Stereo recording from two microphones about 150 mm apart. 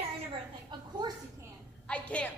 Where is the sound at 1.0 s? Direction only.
25° right (ahead or behind).